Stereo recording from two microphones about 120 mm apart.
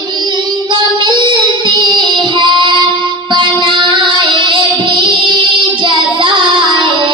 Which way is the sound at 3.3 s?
45° right (ahead or behind).